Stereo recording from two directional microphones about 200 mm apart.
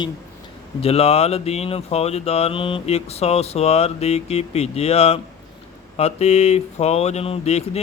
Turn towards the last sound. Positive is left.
turn(degrees=30)  # may be behind; listen again after turning